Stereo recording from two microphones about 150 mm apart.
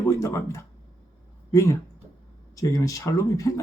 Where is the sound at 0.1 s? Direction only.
20° left (ahead or behind).